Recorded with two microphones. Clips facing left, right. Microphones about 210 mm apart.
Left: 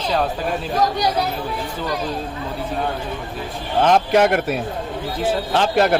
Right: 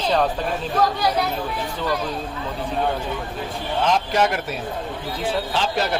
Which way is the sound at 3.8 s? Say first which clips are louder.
Left 5 dB; 55° left (ahead or behind).